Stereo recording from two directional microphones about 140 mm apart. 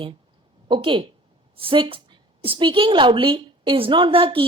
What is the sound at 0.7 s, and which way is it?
A woman's voice, 35° right (ahead or behind).